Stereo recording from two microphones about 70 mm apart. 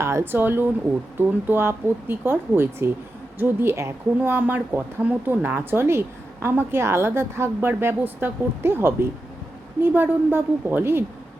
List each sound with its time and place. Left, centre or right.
0.0 s speech: right
0.3 s speech: right